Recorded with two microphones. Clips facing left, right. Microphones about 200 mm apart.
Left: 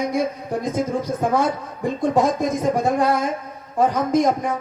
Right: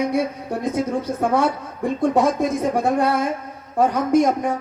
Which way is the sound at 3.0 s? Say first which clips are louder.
Even; 65° right (ahead or behind).